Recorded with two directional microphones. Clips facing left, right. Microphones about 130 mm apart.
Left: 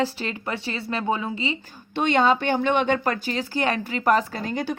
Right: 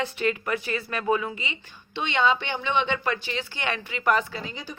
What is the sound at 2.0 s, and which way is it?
Speech, 45° left (ahead or behind).